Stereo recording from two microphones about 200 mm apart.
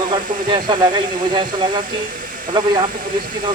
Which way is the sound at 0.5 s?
20° right (ahead or behind).